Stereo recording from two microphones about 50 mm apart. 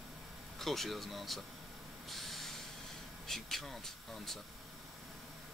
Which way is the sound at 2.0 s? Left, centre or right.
Centre.